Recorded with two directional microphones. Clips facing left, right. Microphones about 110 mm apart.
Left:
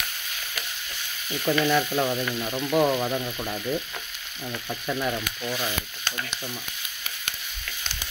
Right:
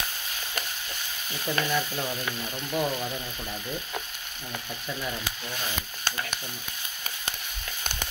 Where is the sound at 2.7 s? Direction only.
65° left (ahead or behind).